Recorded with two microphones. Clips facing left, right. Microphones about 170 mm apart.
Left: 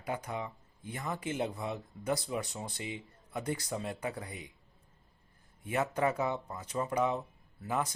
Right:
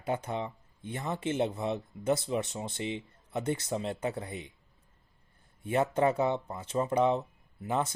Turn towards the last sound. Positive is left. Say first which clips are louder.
# right 3 dB
turn(degrees=-25)  # may be behind; listen again after turning